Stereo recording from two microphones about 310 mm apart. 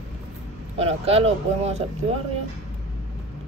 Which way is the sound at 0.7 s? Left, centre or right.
Centre.